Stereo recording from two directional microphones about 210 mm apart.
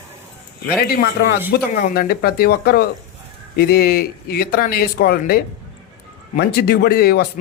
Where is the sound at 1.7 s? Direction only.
45° left (ahead or behind).